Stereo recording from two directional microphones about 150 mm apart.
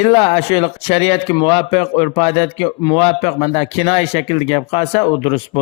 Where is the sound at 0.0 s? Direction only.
45° left (ahead or behind).